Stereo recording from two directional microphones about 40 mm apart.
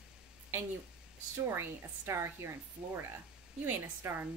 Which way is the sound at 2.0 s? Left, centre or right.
Right.